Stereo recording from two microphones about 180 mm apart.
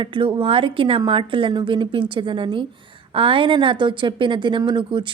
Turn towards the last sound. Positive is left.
turn(degrees=-25)  # may be behind; listen again after turning